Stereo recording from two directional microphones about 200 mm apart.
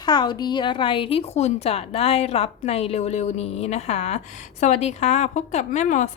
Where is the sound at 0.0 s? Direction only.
20° left (ahead or behind).